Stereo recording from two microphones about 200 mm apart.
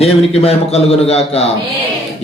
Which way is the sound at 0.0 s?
30° left (ahead or behind).